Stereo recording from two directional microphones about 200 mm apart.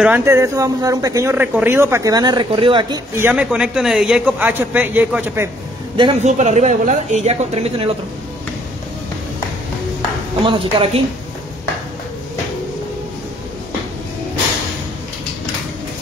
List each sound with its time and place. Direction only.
0.0 s speech: 10° right (ahead or behind)
3.3 s speech: 5° right (ahead or behind)
5.9 s speech: 30° right (ahead or behind)
10.4 s a woman's voice: 25° right (ahead or behind)